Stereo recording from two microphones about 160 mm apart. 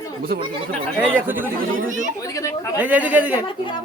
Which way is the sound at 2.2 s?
20° left (ahead or behind).